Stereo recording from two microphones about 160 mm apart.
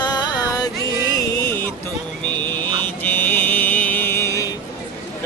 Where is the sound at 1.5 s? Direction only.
15° left (ahead or behind).